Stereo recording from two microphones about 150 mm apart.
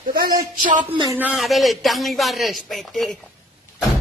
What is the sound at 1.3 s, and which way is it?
Speech, centre (ahead or behind).